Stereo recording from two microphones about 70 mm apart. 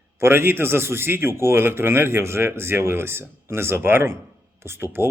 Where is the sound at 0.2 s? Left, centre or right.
Right.